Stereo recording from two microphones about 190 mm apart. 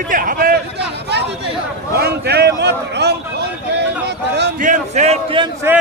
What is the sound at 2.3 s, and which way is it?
Speech, 60° right (ahead or behind).